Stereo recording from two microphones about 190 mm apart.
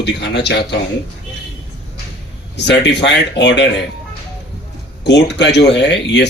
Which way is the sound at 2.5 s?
65° left (ahead or behind).